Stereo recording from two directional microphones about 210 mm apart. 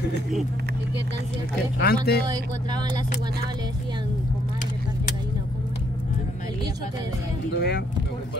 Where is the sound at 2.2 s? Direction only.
20° right (ahead or behind).